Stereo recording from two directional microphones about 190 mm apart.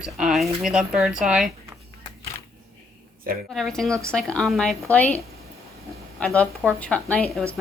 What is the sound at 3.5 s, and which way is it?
A woman's voice, centre (ahead or behind).